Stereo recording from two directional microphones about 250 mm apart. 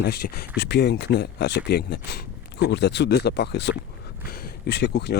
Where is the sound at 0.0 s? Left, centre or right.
Left.